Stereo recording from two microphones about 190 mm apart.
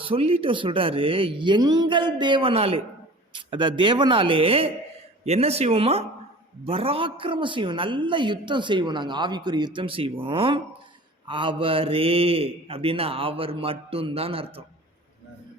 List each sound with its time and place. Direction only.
0.0 s a woman's voice: 30° right (ahead or behind)